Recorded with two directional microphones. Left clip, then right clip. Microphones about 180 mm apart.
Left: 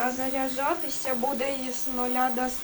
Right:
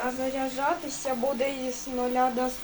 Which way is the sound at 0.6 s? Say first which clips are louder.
Right 1 dB; 5° right (ahead or behind).